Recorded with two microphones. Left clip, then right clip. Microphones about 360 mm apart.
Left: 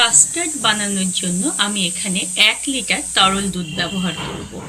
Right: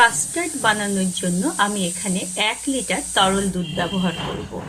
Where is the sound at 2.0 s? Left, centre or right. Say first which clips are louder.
Left 8 dB; centre.